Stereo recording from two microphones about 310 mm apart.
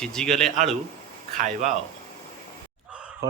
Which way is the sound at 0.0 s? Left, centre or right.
Centre.